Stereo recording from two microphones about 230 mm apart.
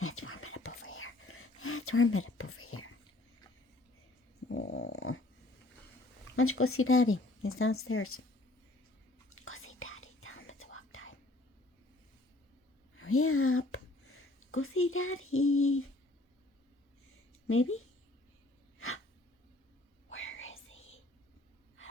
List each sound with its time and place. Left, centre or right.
0.0 s whispering: left
4.4 s dog: left
6.3 s speech: left
9.3 s whispering: left
13.0 s a sound: left
17.5 s a woman's voice: left
20.1 s whispering: left